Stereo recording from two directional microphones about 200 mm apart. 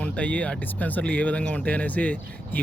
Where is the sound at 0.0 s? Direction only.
5° left (ahead or behind).